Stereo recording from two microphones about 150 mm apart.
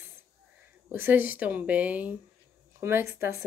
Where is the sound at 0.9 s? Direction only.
15° right (ahead or behind).